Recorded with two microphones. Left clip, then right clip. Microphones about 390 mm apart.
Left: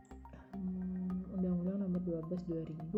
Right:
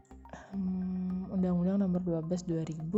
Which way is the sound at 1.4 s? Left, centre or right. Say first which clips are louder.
Right 7 dB; right.